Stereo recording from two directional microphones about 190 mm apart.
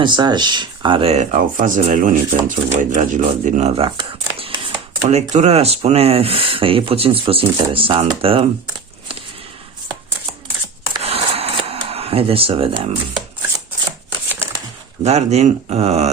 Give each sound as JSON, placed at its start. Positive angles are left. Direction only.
{"t": 0.0, "sound": "speech", "side_deg": -25}
{"t": 3.8, "sound": "speech", "side_deg": -25}
{"t": 11.0, "sound": "camera", "side_deg": -30}
{"t": 14.3, "sound": "a sound", "side_deg": -10}
{"t": 15.0, "sound": "speech", "side_deg": -35}